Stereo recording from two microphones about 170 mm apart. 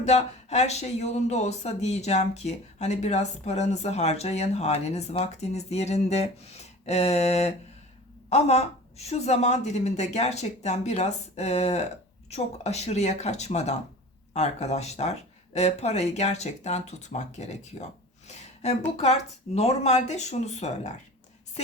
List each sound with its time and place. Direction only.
0.0 s speech: 40° left (ahead or behind)
18.3 s a sound: 40° left (ahead or behind)
18.9 s speech: 40° left (ahead or behind)